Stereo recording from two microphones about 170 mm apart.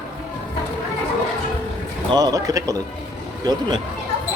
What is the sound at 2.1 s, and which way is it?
Speech, 20° right (ahead or behind).